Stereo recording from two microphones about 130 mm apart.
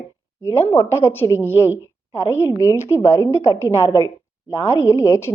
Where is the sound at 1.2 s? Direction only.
35° left (ahead or behind).